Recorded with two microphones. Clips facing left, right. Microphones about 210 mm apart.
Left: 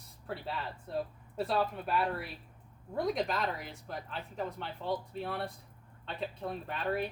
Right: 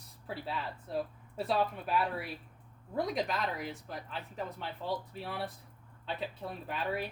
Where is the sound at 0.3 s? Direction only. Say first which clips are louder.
Even; centre (ahead or behind).